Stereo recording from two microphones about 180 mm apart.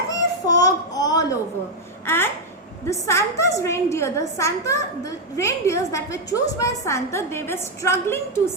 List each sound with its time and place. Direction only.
0.1 s a sound: 20° left (ahead or behind)
2.0 s babbling: 10° left (ahead or behind)
2.8 s a woman's voice: 15° left (ahead or behind)